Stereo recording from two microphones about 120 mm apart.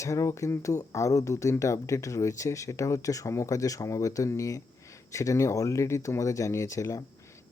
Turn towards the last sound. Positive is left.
turn(degrees=25)  # may be behind; listen again after turning